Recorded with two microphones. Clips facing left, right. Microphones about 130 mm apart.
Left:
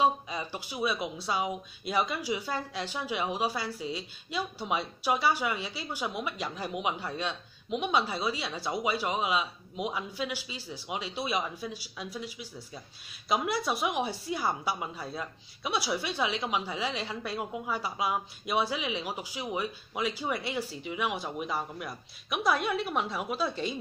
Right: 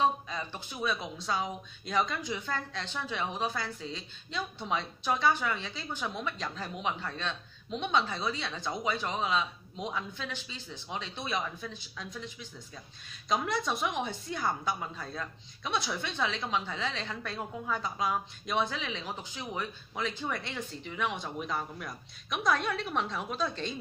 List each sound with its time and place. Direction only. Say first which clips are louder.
0.0 s speech: left 2 dB; 10° left (ahead or behind)